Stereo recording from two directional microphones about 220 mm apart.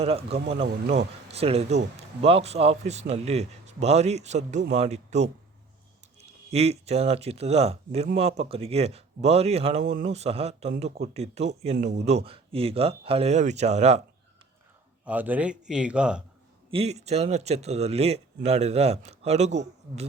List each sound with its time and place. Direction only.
0.0 s speech: 25° right (ahead or behind)
6.5 s speech: 30° right (ahead or behind)
15.0 s a man's voice: 5° right (ahead or behind)
16.7 s speech: 30° right (ahead or behind)